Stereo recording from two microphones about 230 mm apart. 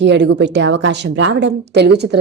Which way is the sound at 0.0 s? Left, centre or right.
Right.